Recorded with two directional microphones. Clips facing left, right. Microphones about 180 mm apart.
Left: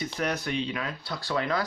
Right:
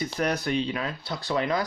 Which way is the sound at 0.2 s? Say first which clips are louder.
Right 3 dB; 35° right (ahead or behind).